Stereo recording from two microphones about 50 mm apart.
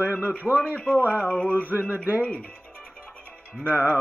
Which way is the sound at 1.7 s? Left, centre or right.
Right.